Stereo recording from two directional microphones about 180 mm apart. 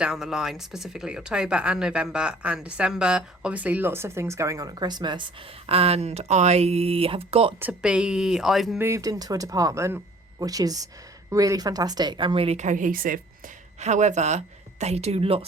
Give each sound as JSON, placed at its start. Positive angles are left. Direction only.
{"t": 0.0, "sound": "speech", "side_deg": 0}
{"t": 7.6, "sound": "speech", "side_deg": -5}
{"t": 8.8, "sound": "a woman's voice", "side_deg": -15}
{"t": 13.7, "sound": "speech", "side_deg": -40}